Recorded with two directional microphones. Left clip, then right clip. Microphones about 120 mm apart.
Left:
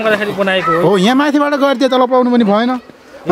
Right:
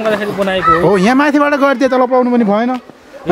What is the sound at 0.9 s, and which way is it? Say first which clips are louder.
A man's voice: right 1 dB; 5° left (ahead or behind).